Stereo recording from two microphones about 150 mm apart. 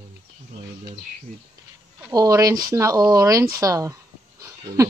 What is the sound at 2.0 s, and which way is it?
Speech, 20° right (ahead or behind).